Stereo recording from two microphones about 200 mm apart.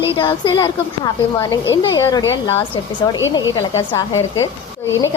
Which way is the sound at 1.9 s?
20° left (ahead or behind).